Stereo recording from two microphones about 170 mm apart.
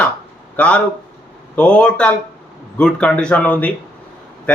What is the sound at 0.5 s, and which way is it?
A man's voice, 5° left (ahead or behind).